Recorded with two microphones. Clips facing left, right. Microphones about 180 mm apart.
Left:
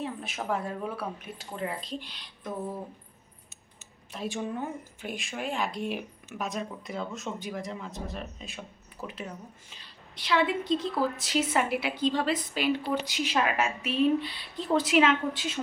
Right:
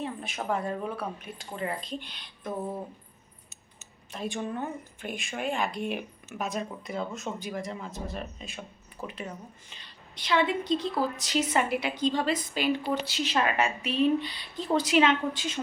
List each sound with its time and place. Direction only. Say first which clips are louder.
0.0 s a man's voice: even; centre (ahead or behind)
2.5 s speech: right 1 dB; 20° right (ahead or behind)
4.1 s a man's voice: even; centre (ahead or behind)
13.1 s a man's voice: even; 10° left (ahead or behind)